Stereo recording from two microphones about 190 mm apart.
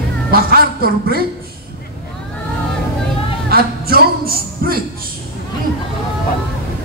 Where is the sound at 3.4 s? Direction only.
55° right (ahead or behind).